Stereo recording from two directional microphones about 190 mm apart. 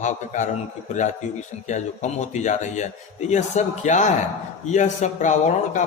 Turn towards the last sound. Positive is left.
turn(degrees=40)  # may be behind; listen again after turning